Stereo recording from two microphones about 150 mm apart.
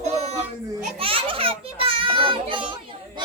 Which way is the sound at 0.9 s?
40° right (ahead or behind).